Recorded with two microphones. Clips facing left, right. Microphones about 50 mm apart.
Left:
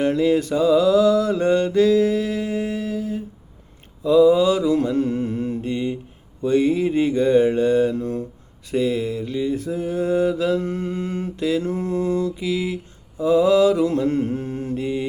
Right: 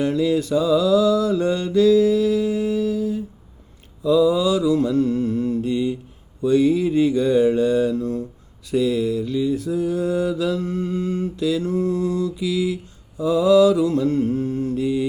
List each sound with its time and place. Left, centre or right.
0.0 s mantra: left